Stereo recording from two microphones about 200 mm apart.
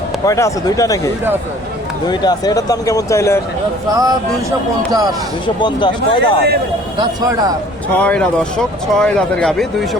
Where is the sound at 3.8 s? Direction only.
20° right (ahead or behind).